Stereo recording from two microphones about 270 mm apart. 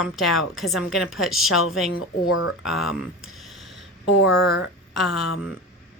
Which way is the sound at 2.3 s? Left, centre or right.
Left.